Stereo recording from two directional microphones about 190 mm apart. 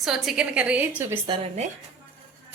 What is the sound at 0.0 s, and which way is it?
Speech, centre (ahead or behind).